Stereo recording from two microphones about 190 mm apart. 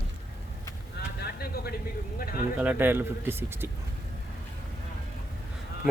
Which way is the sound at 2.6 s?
10° right (ahead or behind).